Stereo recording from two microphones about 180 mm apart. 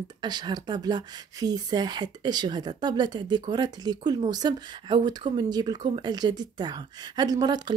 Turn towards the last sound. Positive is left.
turn(degrees=-20)  # may be behind; listen again after turning